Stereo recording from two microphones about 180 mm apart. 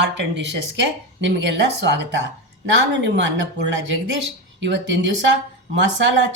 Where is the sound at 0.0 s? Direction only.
80° right.